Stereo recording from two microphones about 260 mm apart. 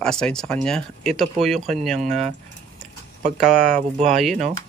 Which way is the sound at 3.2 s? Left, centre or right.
Right.